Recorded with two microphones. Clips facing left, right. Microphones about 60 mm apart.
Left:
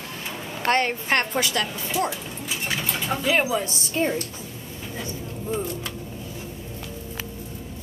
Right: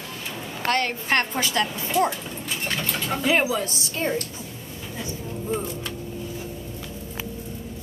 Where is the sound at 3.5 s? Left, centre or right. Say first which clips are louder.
Left 1 dB; centre.